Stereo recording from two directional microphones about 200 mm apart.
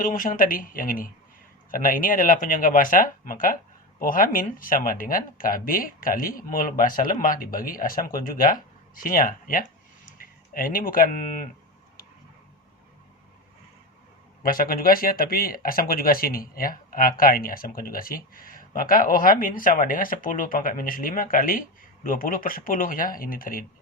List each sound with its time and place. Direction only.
0.0 s speech: 45° left (ahead or behind)
14.4 s speech: 45° left (ahead or behind)